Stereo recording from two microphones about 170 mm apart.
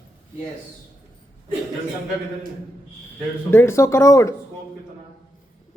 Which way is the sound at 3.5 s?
15° left (ahead or behind).